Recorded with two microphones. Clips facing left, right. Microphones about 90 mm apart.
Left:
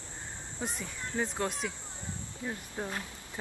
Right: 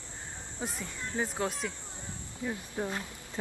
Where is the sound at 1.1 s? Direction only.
10° right (ahead or behind).